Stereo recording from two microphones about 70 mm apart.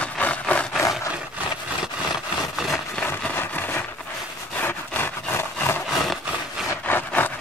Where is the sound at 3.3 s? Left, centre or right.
Left.